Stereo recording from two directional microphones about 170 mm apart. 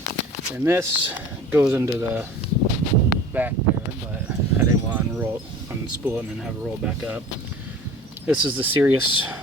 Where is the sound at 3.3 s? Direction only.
10° right (ahead or behind).